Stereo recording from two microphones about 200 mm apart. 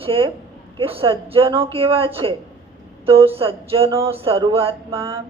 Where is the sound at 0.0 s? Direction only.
25° right (ahead or behind).